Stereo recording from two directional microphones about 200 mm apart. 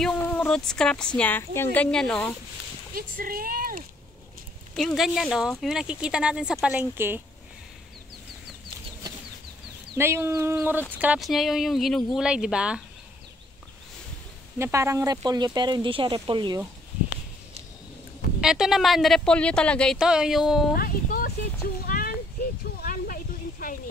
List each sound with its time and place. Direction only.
0.0 s a woman's voice: 5° left (ahead or behind)
2.9 s speech: 45° right (ahead or behind)
4.7 s a woman's voice: centre (ahead or behind)
9.9 s a woman's voice: 10° right (ahead or behind)
14.6 s speech: 15° right (ahead or behind)
18.4 s a woman's voice: centre (ahead or behind)
20.7 s speech: 45° left (ahead or behind)
21.8 s a sound: 45° left (ahead or behind)